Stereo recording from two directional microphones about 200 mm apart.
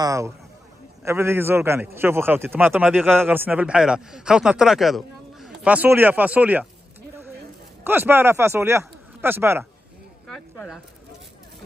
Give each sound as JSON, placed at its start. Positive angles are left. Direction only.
{"t": 0.0, "sound": "speech", "side_deg": -15}
{"t": 7.8, "sound": "speech", "side_deg": -10}
{"t": 10.2, "sound": "speech", "side_deg": 0}